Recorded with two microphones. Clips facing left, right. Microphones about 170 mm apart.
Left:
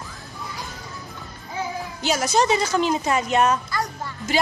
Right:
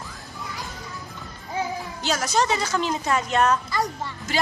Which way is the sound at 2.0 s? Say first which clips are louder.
Left 3 dB; 10° left (ahead or behind).